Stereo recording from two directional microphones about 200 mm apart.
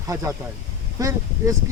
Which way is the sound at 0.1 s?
15° right (ahead or behind).